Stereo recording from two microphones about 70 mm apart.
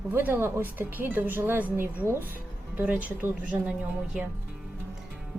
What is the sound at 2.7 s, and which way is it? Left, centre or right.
A woman's voice, right.